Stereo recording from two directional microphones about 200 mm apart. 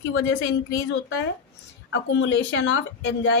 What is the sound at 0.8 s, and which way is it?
A woman's voice, 60° left (ahead or behind).